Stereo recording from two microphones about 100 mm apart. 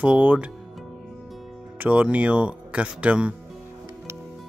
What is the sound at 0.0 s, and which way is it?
Speech, 15° right (ahead or behind).